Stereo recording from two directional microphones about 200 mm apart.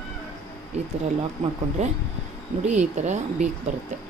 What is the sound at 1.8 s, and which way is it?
Speech, 30° right (ahead or behind).